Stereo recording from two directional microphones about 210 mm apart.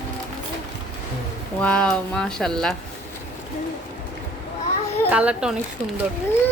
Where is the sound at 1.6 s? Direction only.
5° left (ahead or behind).